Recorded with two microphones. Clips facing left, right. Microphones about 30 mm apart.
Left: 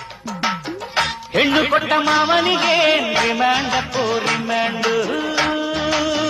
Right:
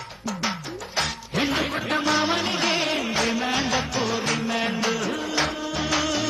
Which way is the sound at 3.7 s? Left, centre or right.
Centre.